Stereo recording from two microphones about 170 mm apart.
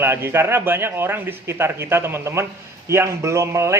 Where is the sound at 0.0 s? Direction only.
15° right (ahead or behind).